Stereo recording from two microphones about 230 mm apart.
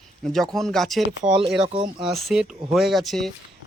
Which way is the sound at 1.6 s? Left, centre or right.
Right.